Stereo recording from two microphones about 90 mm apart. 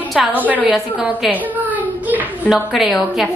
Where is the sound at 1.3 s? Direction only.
20° right (ahead or behind).